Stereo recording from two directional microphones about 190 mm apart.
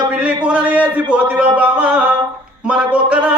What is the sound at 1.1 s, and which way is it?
Speech, 5° right (ahead or behind).